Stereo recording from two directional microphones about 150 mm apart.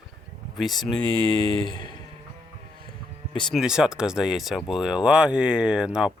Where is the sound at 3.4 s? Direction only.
5° right (ahead or behind).